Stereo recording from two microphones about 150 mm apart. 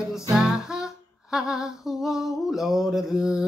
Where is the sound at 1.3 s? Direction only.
5° right (ahead or behind).